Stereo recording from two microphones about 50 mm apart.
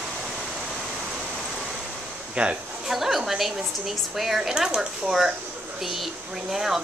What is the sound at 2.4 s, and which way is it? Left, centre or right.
Speech, right.